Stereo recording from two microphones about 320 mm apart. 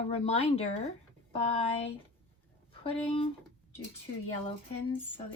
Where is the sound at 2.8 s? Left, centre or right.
Centre.